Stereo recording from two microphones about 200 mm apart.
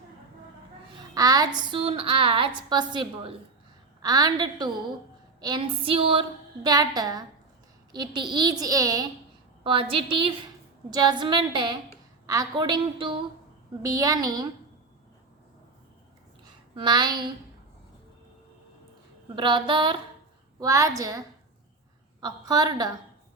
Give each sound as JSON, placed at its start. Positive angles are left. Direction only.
{"t": 1.1, "sound": "a woman's voice", "side_deg": -20}
{"t": 16.7, "sound": "a woman's voice", "side_deg": -20}
{"t": 19.4, "sound": "a woman's voice", "side_deg": -25}
{"t": 22.2, "sound": "a woman's voice", "side_deg": -20}